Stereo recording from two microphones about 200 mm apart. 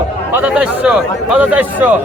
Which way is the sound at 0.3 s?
5° right (ahead or behind).